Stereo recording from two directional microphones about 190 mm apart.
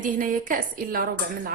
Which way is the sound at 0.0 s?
45° right (ahead or behind).